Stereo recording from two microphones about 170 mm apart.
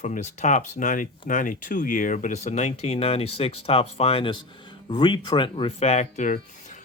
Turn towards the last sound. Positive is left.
turn(degrees=45)  # may be behind; listen again after turning